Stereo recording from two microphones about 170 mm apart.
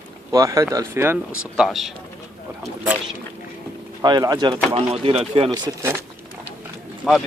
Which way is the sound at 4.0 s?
20° right (ahead or behind).